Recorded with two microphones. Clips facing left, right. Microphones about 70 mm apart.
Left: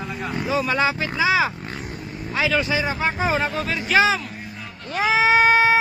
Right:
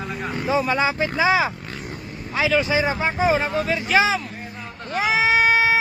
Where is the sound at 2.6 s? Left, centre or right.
Right.